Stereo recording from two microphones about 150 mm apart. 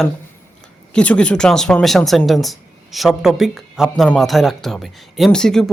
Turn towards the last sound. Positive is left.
turn(degrees=5)  # may be behind; listen again after turning